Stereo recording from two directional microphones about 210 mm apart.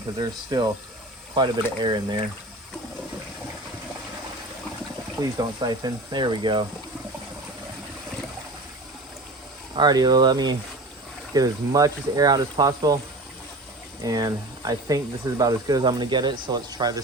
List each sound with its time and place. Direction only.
0.2 s speech: 15° right (ahead or behind)
5.5 s speech: 20° right (ahead or behind)
9.7 s speech: 20° right (ahead or behind)
14.0 s speech: 20° right (ahead or behind)